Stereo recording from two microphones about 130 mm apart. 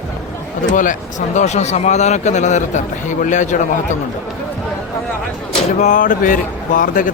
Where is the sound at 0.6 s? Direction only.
85° left.